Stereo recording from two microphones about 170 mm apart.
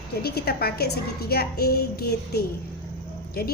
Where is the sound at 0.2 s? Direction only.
65° left (ahead or behind).